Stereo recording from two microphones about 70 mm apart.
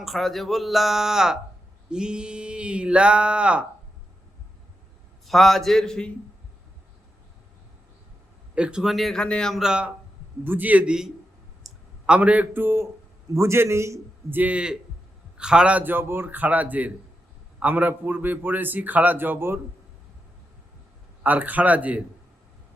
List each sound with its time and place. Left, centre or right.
0.0 s speech: centre
1.9 s a sound: centre
5.2 s speech: centre
8.5 s a sound: centre
9.1 s speech: centre
9.6 s a sound: centre
10.4 s a man's voice: right
11.6 s clicking: centre
12.0 s a man's voice: centre; by 14.0 s right
14.3 s a man's voice: right
15.4 s a sound: centre
15.8 s a man's voice: right
21.2 s a man's voice: right